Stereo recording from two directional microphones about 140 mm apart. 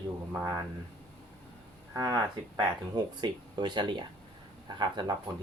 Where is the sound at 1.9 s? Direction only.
30° right (ahead or behind).